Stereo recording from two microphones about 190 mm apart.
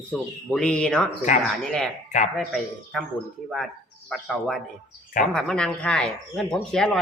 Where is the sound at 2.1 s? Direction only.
40° left (ahead or behind).